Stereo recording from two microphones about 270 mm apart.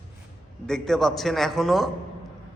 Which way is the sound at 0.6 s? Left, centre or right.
Centre.